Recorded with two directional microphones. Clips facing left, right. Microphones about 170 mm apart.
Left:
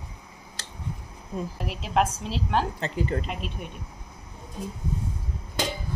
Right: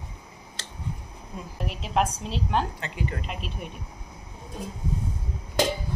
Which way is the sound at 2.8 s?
35° left (ahead or behind).